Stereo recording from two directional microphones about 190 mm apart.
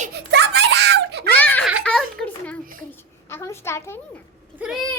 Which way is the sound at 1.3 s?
10° left (ahead or behind).